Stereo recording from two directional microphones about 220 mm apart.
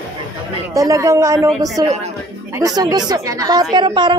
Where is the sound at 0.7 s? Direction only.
15° right (ahead or behind).